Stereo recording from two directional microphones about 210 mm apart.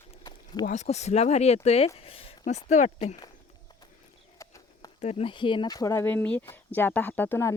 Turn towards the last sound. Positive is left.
turn(degrees=10)  # may be behind; listen again after turning